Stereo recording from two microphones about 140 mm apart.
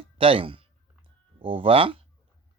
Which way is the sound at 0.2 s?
40° right (ahead or behind).